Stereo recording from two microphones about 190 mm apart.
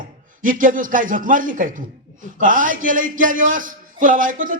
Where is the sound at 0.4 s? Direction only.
45° right (ahead or behind).